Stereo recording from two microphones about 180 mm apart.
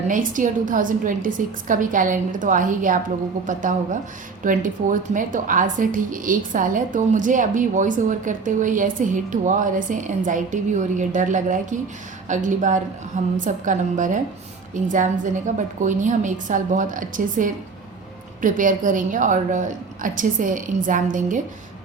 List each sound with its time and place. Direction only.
0.1 s a woman's voice: 45° right (ahead or behind)